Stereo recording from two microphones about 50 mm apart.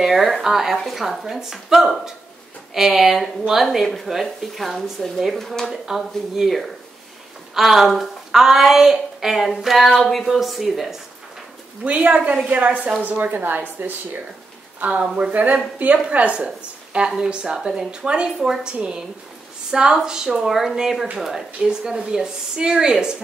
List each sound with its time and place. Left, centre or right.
0.0 s speech: centre
7.5 s speech: centre
12.4 s speech: right; by 23.1 s centre